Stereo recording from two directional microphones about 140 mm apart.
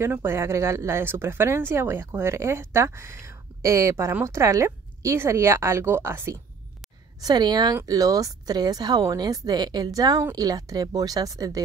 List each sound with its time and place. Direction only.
0.0 s speech: 15° right (ahead or behind)